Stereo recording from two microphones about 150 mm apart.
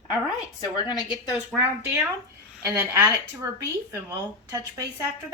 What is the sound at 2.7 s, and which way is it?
A woman's voice, 15° right (ahead or behind).